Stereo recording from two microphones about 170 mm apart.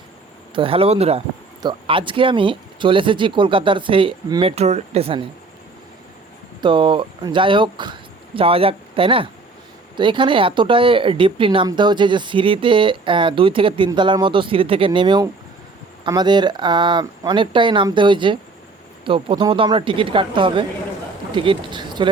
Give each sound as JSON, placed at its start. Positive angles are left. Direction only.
{"t": 0.5, "sound": "speech", "side_deg": -30}
{"t": 6.6, "sound": "speech", "side_deg": -30}